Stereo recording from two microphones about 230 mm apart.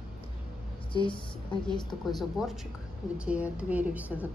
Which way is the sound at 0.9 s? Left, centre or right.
Left.